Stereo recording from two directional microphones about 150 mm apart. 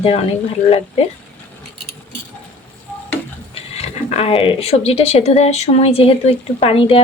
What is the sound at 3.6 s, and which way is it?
Speech, 45° left (ahead or behind).